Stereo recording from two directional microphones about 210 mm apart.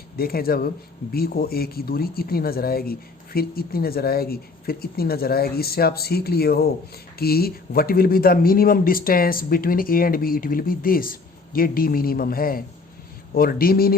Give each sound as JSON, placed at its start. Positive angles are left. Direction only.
{"t": 0.2, "sound": "speech", "side_deg": 45}